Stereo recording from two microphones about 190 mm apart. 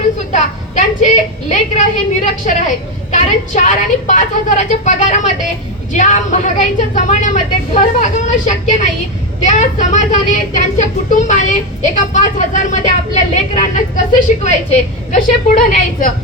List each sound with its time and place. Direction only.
0.3 s a woman's voice: 40° left (ahead or behind)
15.1 s a woman's voice: 40° left (ahead or behind)